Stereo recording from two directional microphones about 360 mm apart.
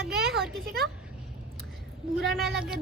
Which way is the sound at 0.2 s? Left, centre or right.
Centre.